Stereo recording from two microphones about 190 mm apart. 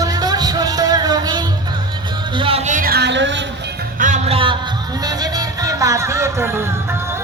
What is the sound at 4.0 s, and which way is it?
Music, 40° right (ahead or behind).